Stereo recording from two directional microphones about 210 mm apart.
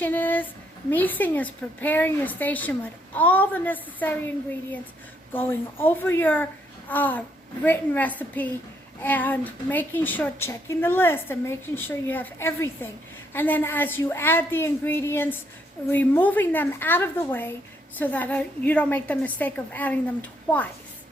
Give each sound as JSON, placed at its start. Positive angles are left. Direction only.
{"t": 0.0, "sound": "a sound", "side_deg": 10}
{"t": 0.9, "sound": "a woman's voice", "side_deg": 10}
{"t": 5.3, "sound": "a woman's voice", "side_deg": 10}